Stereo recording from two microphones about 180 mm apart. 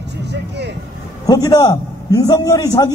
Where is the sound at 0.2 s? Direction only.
70° right (ahead or behind).